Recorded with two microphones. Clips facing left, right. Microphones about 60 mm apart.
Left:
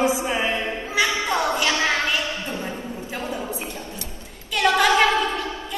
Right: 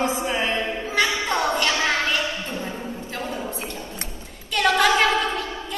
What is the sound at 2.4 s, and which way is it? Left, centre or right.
Music, centre.